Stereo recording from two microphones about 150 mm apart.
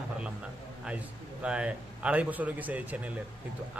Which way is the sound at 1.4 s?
5° right (ahead or behind).